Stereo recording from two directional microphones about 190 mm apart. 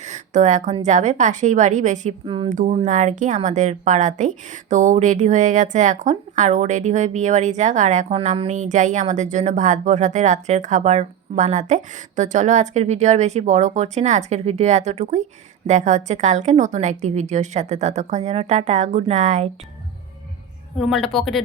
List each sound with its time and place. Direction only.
0.0 s a woman's voice: 40° right (ahead or behind)
2.2 s speech: 25° right (ahead or behind)
2.5 s a woman's voice: 40° right (ahead or behind)
20.7 s speech: centre (ahead or behind)